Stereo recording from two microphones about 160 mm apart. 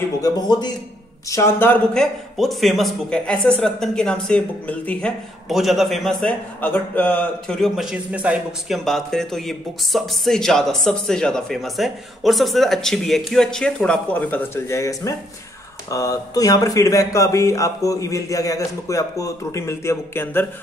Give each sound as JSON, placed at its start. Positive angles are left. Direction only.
{"t": 0.2, "sound": "speech", "side_deg": 25}
{"t": 1.3, "sound": "speech", "side_deg": 15}
{"t": 2.0, "sound": "a man's voice", "side_deg": 0}
{"t": 6.2, "sound": "a man's voice", "side_deg": 10}